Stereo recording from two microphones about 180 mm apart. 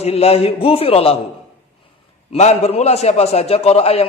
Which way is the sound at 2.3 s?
35° left (ahead or behind).